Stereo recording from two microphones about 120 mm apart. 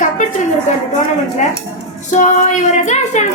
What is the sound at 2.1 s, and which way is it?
A woman's voice, 90° left.